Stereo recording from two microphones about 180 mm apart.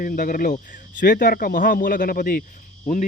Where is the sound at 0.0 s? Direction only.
50° left (ahead or behind).